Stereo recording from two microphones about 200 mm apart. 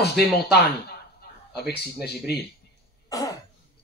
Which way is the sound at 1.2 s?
55° left (ahead or behind).